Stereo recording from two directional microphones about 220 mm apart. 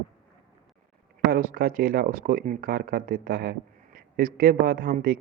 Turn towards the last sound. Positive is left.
turn(degrees=-40)  # may be behind; listen again after turning